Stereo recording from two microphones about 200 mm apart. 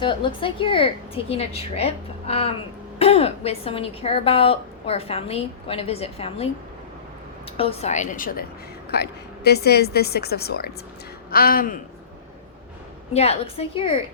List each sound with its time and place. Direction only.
0.0 s a woman's voice: 25° left (ahead or behind)
7.5 s a woman's voice: 30° left (ahead or behind); by 11.8 s 45° left (ahead or behind)
13.1 s a woman's voice: 30° left (ahead or behind)